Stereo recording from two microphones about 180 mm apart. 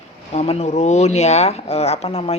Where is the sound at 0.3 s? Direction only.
35° left (ahead or behind).